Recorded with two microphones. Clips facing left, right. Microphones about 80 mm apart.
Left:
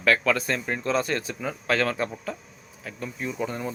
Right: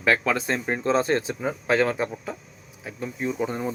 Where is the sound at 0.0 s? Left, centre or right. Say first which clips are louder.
Even; right.